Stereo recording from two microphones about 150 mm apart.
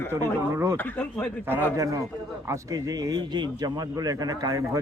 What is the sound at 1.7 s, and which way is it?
Speech, 20° right (ahead or behind).